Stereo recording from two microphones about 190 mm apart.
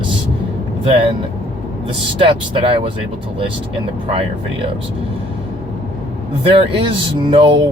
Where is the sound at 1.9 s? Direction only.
25° right (ahead or behind).